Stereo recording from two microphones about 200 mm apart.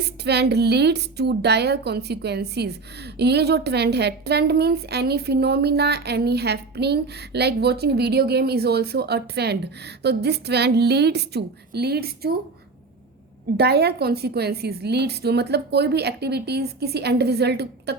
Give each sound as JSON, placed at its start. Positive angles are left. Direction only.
{"t": 0.3, "sound": "a woman's voice", "side_deg": -55}
{"t": 13.6, "sound": "a woman's voice", "side_deg": -55}